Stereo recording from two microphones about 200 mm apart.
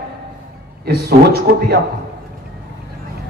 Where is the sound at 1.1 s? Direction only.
50° right (ahead or behind).